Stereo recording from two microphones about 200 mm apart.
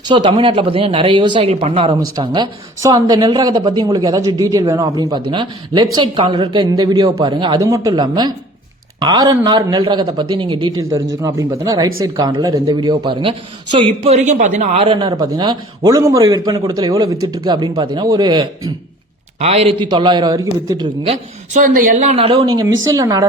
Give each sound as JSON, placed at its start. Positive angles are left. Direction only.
{"t": 0.1, "sound": "a woman's voice", "side_deg": -25}
{"t": 19.4, "sound": "speech", "side_deg": -30}
{"t": 21.6, "sound": "speech", "side_deg": -45}
{"t": 22.4, "sound": "a woman's voice", "side_deg": -20}